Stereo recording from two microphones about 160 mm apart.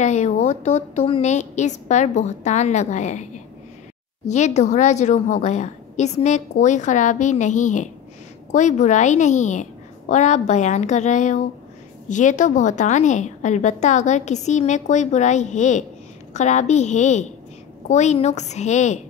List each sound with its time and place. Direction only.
0.0 s a woman's voice: 45° left (ahead or behind)
4.3 s a woman's voice: 45° left (ahead or behind)